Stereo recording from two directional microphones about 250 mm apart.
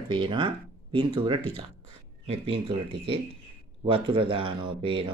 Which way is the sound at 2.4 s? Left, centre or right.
Right.